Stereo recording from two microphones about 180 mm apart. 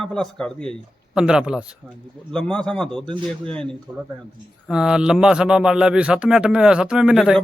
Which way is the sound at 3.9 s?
25° right (ahead or behind).